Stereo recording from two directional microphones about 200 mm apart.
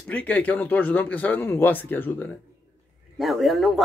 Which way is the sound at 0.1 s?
5° left (ahead or behind).